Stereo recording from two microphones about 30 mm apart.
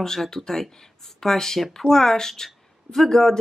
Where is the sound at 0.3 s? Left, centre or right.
Centre.